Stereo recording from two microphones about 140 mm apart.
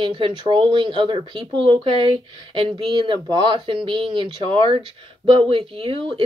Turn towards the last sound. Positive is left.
turn(degrees=-40)  # may be behind; listen again after turning